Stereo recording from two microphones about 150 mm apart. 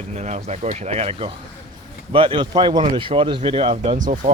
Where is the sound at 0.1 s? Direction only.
45° right (ahead or behind).